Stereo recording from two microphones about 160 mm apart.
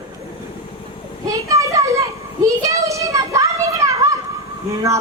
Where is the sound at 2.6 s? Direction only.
20° right (ahead or behind).